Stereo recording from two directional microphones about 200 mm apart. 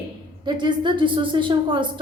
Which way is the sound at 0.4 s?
20° right (ahead or behind).